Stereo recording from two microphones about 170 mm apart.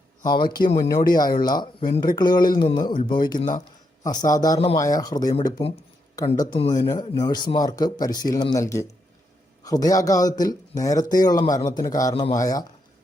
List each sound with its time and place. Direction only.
0.3 s speech: 25° left (ahead or behind)